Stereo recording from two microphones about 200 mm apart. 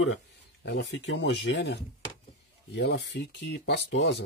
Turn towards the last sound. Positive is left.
turn(degrees=60)  # may be behind; listen again after turning